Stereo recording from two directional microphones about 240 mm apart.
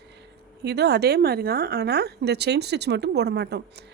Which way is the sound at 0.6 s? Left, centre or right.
Right.